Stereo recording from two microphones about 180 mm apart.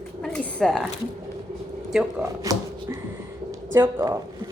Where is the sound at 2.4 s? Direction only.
20° right (ahead or behind).